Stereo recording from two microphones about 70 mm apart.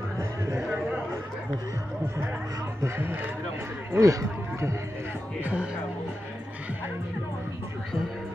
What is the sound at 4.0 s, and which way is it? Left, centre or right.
Speech, right.